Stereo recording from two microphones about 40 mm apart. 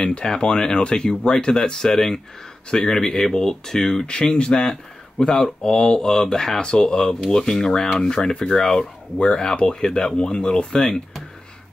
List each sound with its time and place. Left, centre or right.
0.0 s speech: left
2.7 s speech: centre